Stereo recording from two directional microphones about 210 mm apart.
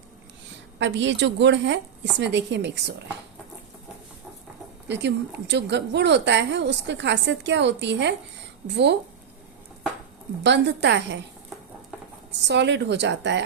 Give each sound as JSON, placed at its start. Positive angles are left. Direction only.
{"t": 0.8, "sound": "a woman's voice", "side_deg": -60}
{"t": 4.9, "sound": "a woman's voice", "side_deg": -55}
{"t": 10.4, "sound": "a woman's voice", "side_deg": -55}
{"t": 12.5, "sound": "a woman's voice", "side_deg": -55}